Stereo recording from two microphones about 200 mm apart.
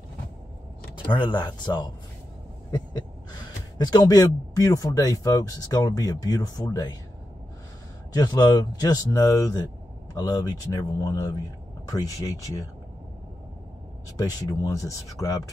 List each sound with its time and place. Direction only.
1.1 s speech: 25° left (ahead or behind)
3.7 s speech: 20° left (ahead or behind)
8.1 s speech: 20° left (ahead or behind)
14.1 s speech: 15° left (ahead or behind)